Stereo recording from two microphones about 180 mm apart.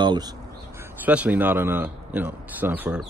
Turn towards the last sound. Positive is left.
turn(degrees=-5)  # may be behind; listen again after turning